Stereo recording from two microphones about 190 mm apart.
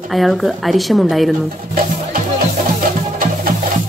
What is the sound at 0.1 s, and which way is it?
A woman's voice, centre (ahead or behind).